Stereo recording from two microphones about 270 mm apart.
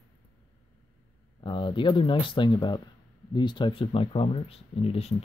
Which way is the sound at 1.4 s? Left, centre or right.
Centre.